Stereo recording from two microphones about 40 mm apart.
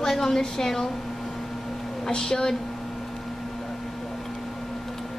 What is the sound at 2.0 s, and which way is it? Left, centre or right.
Speech, centre.